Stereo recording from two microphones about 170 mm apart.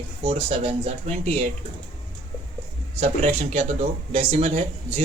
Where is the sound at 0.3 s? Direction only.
35° right (ahead or behind).